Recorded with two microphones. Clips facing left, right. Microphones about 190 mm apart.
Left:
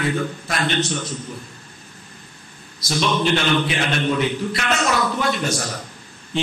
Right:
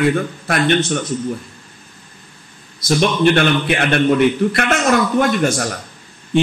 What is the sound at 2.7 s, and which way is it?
A man's voice, 55° right (ahead or behind).